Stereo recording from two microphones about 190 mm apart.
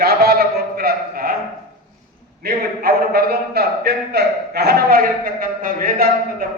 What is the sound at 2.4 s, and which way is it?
A man's voice, 55° right (ahead or behind).